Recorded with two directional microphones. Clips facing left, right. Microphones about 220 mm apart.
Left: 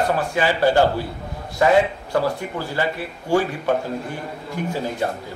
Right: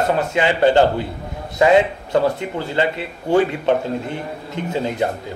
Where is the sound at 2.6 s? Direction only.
20° right (ahead or behind).